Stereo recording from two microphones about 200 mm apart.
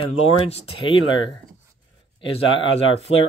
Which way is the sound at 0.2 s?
30° left (ahead or behind).